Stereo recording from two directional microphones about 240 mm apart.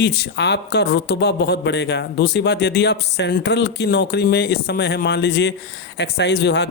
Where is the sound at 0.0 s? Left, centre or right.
Left.